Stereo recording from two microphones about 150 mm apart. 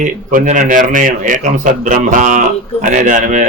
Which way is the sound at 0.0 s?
60° right (ahead or behind).